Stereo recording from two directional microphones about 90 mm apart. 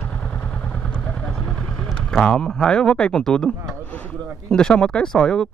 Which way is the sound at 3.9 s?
15° left (ahead or behind).